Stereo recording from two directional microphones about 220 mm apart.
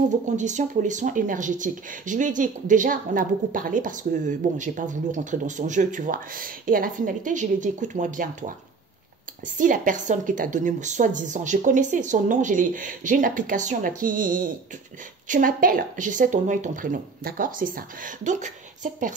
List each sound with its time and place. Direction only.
0.4 s speech: 35° right (ahead or behind)
9.6 s speech: 35° right (ahead or behind)